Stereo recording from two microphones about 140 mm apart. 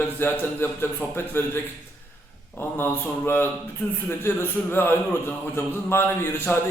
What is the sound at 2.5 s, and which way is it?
A man's voice, 15° left (ahead or behind).